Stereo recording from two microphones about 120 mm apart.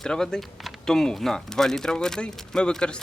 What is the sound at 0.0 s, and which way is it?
Speech, 5° left (ahead or behind).